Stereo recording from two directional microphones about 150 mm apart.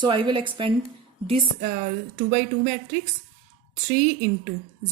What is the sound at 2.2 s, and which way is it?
Speech, 50° right (ahead or behind).